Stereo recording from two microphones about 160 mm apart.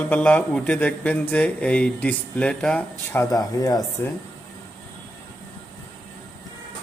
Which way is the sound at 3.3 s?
25° left (ahead or behind).